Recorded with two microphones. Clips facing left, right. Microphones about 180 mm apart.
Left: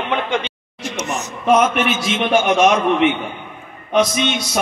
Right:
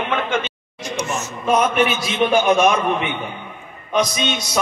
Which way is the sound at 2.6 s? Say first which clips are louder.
Left 4 dB; 90° left.